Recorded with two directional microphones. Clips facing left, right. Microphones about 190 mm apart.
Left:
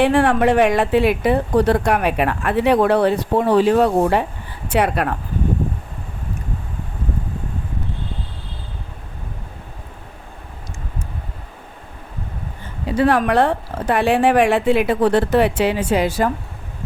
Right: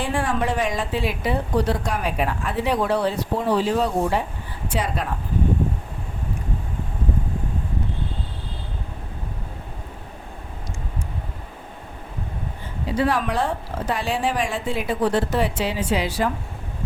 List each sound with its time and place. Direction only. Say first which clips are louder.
0.0 s speech: left 9 dB; 65° left (ahead or behind)
13.0 s speech: left 7 dB; 60° left (ahead or behind)